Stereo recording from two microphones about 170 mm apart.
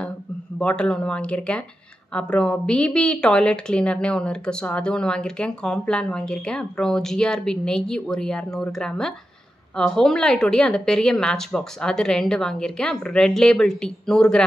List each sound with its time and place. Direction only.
0.6 s a woman's voice: 5° left (ahead or behind)